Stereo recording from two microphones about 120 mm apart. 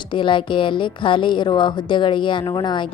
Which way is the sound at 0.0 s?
40° left (ahead or behind).